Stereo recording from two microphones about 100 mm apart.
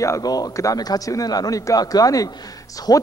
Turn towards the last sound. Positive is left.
turn(degrees=40)  # may be behind; listen again after turning